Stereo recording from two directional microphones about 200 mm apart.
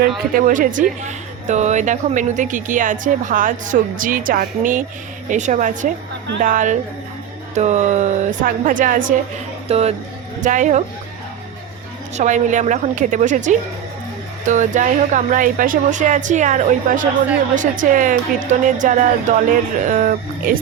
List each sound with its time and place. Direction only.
0.3 s speech: 45° right (ahead or behind)
9.6 s speech: 30° right (ahead or behind)
12.1 s speech: 35° right (ahead or behind)